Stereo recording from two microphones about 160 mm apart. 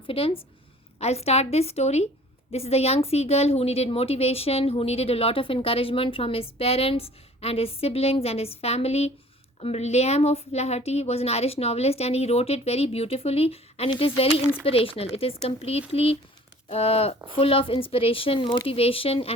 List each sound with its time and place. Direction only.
0.1 s speech: 35° left (ahead or behind)